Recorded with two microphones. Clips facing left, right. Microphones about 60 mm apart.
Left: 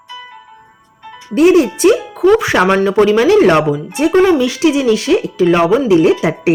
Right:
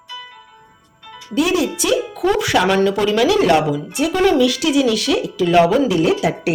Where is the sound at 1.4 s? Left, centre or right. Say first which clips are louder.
Left 8 dB; left.